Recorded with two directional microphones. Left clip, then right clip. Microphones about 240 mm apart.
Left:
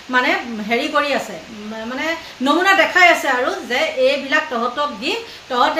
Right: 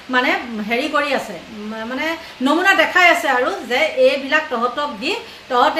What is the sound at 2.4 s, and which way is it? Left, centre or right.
A woman's voice, centre.